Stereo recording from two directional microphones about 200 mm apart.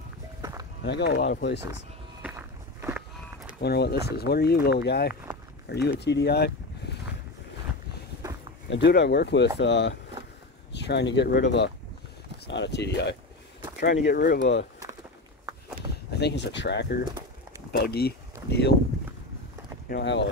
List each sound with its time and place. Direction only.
0.4 s music: 20° right (ahead or behind)
0.8 s speech: 55° left (ahead or behind)
2.2 s walk: 10° right (ahead or behind)
3.6 s speech: 55° left (ahead or behind)
8.6 s speech: 60° left (ahead or behind)
16.1 s speech: 55° left (ahead or behind)
19.9 s speech: 60° left (ahead or behind)